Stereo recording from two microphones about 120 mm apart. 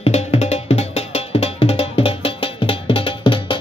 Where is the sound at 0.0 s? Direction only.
60° left (ahead or behind).